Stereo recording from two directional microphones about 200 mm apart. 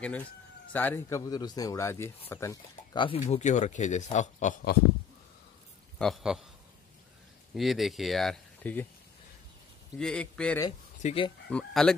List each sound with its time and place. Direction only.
0.7 s speech: 10° left (ahead or behind); by 4.6 s 35° left (ahead or behind)
5.9 s speech: centre (ahead or behind)
7.5 s speech: centre (ahead or behind)
9.9 s speech: 5° left (ahead or behind)
11.0 s speech: 35° left (ahead or behind)
11.4 s speech: 5° left (ahead or behind)